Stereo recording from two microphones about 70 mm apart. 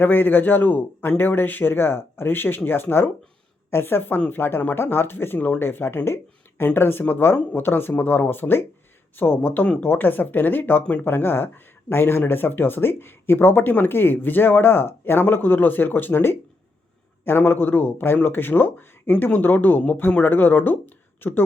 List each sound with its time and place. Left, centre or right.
0.0 s a man's voice: left